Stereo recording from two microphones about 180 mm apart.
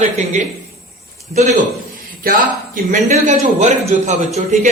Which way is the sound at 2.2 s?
50° right (ahead or behind).